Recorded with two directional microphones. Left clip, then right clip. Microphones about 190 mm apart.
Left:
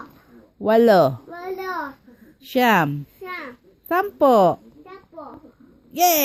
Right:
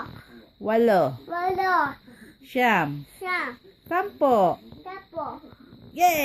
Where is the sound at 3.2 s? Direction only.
10° right (ahead or behind).